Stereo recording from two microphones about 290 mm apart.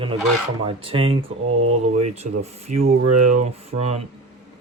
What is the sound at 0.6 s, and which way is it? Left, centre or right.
Speech, centre.